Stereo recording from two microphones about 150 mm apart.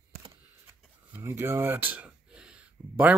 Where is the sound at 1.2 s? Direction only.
15° right (ahead or behind).